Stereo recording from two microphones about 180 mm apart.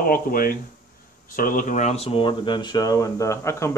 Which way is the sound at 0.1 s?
55° left (ahead or behind).